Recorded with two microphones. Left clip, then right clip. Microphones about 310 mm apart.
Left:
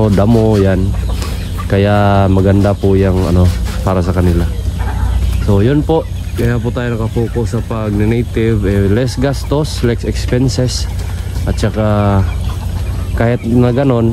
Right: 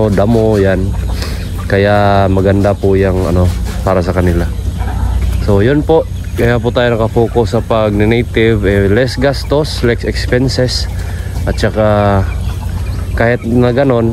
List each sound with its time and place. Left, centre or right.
0.0 s speech: centre
5.5 s speech: centre